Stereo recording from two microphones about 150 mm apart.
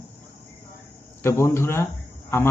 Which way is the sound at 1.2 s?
15° left (ahead or behind).